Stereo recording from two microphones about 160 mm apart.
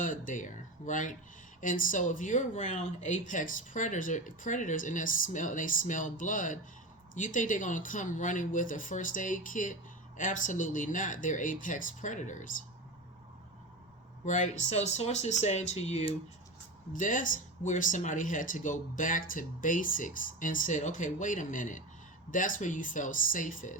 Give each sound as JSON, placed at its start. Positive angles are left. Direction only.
{"t": 0.0, "sound": "speech", "side_deg": 55}
{"t": 14.3, "sound": "speech", "side_deg": 50}
{"t": 16.9, "sound": "speech", "side_deg": 55}